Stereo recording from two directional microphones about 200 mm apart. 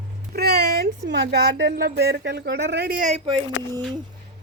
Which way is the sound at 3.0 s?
35° right (ahead or behind).